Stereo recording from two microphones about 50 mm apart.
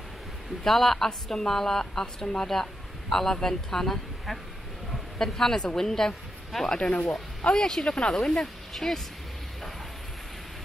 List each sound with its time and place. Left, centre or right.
0.7 s a woman's voice: centre
6.8 s speech: left
7.5 s a woman's voice: centre